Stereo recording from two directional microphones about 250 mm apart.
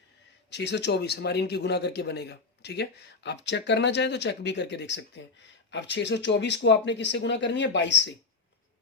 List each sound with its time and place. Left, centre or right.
0.5 s a man's voice: left